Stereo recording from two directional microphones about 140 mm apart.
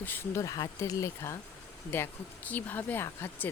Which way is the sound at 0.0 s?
15° left (ahead or behind).